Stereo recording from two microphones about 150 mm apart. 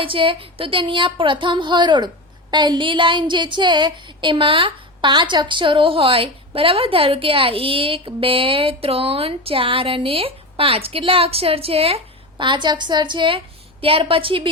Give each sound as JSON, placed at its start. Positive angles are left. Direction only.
{"t": 0.0, "sound": "a woman's voice", "side_deg": -35}